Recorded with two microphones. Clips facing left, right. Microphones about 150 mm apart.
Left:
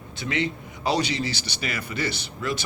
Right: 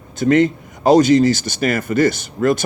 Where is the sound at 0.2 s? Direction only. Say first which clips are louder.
Right 14 dB; 45° right (ahead or behind).